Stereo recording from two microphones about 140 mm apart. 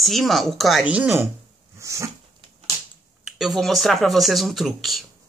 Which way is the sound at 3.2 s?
Centre (ahead or behind).